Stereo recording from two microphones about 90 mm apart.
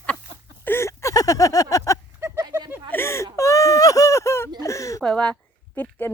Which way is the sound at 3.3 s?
35° left (ahead or behind).